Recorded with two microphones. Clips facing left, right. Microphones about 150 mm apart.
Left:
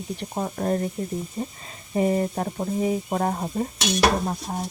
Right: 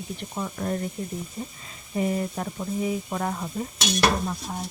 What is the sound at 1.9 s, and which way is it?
Speech, 35° left (ahead or behind).